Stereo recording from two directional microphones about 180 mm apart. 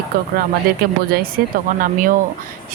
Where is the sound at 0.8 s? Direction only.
60° right (ahead or behind).